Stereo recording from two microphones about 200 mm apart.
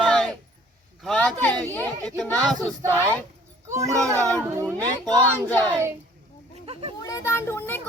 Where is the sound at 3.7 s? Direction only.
15° right (ahead or behind).